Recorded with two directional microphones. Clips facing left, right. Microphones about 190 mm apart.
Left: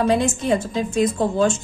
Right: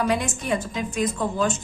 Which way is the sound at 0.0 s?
30° left (ahead or behind).